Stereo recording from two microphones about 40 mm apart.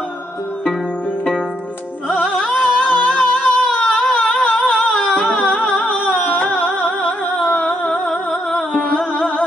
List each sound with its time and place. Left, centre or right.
2.2 s music: left
3.7 s a sound: left
5.4 s music: left
8.1 s music: left